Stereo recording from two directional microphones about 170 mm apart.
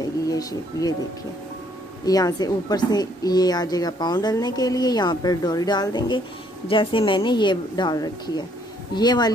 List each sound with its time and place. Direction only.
0.3 s a woman's voice: 20° left (ahead or behind)
2.0 s a woman's voice: 20° left (ahead or behind)